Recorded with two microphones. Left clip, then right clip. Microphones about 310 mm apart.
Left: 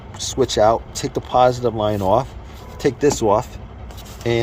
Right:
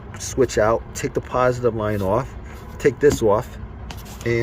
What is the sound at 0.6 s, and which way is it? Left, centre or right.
Speech, left.